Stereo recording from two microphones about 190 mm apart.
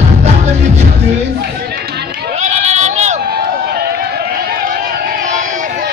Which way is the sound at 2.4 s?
35° right (ahead or behind).